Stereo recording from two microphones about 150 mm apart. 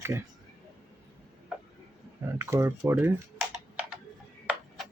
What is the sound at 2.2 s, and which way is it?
Speech, 20° right (ahead or behind).